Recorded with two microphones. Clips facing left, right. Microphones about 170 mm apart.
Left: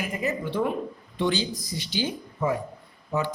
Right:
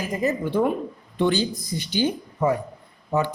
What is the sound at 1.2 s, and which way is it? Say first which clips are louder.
Speech: right 4 dB; 55° right (ahead or behind).